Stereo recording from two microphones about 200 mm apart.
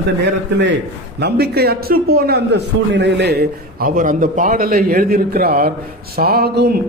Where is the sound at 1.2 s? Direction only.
50° right (ahead or behind).